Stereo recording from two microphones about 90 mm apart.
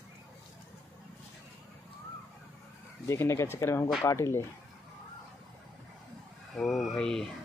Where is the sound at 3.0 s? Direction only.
30° left (ahead or behind).